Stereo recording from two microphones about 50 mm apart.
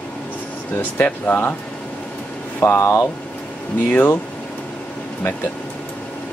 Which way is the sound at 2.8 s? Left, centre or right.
Left.